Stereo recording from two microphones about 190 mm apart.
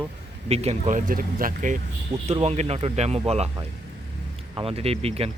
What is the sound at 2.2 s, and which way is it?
Speech, 30° right (ahead or behind).